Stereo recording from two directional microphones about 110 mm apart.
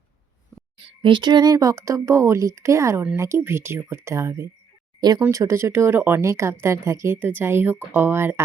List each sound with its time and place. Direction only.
0.9 s speech: 50° right (ahead or behind); by 4.4 s 25° right (ahead or behind)
4.9 s speech: 40° right (ahead or behind)
5.3 s speech: 25° right (ahead or behind)